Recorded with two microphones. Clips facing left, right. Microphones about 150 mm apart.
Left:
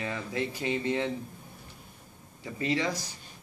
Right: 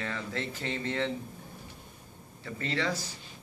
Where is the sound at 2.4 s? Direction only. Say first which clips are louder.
Left 2 dB; 15° left (ahead or behind).